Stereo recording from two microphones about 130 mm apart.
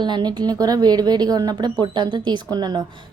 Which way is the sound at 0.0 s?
35° right (ahead or behind).